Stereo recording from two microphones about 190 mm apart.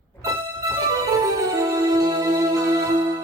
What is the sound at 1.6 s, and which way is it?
Music, 20° right (ahead or behind).